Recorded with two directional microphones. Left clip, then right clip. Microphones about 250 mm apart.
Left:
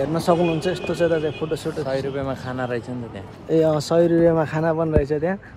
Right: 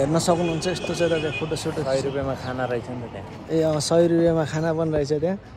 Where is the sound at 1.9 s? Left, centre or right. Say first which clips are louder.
Right 1 dB; left.